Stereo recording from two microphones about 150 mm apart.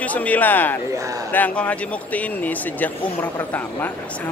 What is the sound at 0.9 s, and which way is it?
Speech, 20° right (ahead or behind).